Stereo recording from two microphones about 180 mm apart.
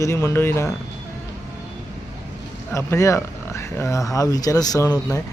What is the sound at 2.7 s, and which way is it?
Speech, 15° left (ahead or behind).